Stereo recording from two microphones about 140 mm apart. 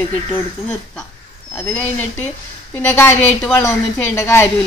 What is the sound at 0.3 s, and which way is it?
A woman's voice, 10° left (ahead or behind).